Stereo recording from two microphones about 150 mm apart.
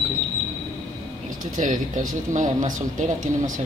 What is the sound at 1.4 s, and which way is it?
Speech, 60° right (ahead or behind).